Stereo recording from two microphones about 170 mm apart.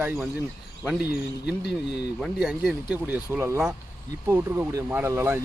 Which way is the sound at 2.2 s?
Centre (ahead or behind).